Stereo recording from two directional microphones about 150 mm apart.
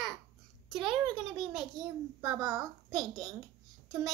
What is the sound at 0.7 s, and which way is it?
Speech, 5° right (ahead or behind).